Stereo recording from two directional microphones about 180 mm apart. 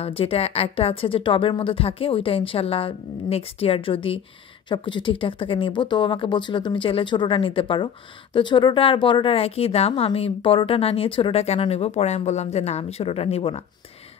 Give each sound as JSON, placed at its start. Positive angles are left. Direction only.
{"t": 0.0, "sound": "a woman's voice", "side_deg": 30}